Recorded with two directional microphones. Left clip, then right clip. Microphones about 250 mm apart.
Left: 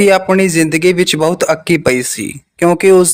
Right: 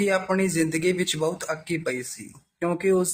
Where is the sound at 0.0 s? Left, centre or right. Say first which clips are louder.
Left 14 dB; left.